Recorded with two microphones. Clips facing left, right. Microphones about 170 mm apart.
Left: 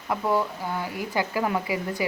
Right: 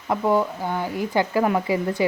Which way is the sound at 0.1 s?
20° right (ahead or behind).